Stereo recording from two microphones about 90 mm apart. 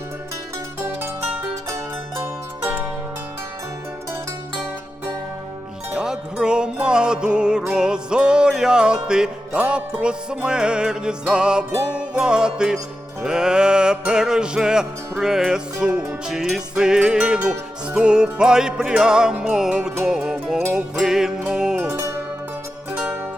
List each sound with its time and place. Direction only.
0.9 s music: 25° right (ahead or behind)
1.7 s zither: 25° right (ahead or behind)
5.9 s music: 10° right (ahead or behind)
21.8 s zither: 30° right (ahead or behind)